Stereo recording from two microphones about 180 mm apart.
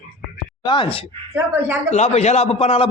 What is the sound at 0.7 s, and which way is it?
Speech, 30° left (ahead or behind).